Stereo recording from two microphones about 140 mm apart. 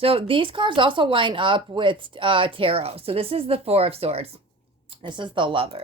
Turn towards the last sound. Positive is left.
turn(degrees=-40)  # may be behind; listen again after turning